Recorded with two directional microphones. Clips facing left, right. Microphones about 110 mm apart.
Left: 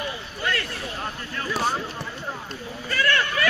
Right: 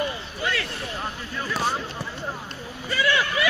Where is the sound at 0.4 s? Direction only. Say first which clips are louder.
Even; 5° right (ahead or behind).